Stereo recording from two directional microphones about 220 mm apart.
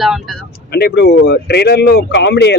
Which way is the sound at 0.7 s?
50° left (ahead or behind).